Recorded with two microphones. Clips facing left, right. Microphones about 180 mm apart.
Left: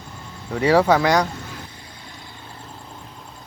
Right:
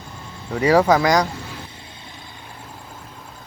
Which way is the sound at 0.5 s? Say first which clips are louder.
Right 1 dB; 10° right (ahead or behind).